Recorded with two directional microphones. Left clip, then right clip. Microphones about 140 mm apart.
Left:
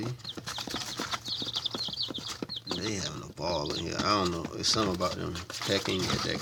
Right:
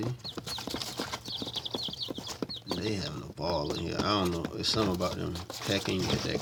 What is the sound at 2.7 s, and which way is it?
Speech, 15° right (ahead or behind).